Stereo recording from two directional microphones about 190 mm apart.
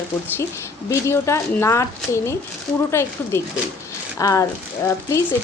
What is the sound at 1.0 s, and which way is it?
A woman's voice, 15° left (ahead or behind).